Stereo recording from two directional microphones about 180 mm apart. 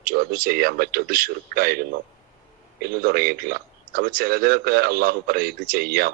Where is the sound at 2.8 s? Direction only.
55° right (ahead or behind).